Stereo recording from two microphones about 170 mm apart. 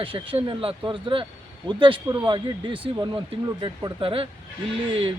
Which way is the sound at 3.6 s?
30° right (ahead or behind).